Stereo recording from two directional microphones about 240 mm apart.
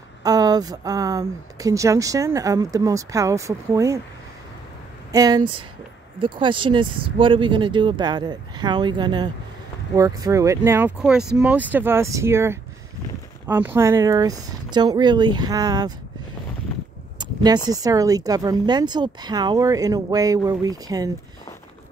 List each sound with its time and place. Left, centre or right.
0.2 s speech: centre
5.1 s speech: centre
17.2 s speech: centre